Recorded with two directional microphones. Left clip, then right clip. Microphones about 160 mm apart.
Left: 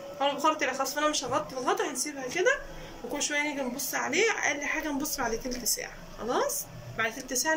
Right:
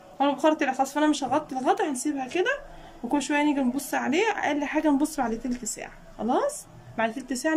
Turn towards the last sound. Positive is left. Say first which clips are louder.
# right 2 dB
turn(degrees=-75)  # may be behind; listen again after turning